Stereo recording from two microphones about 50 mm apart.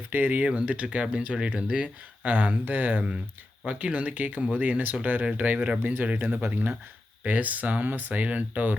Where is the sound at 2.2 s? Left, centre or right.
Right.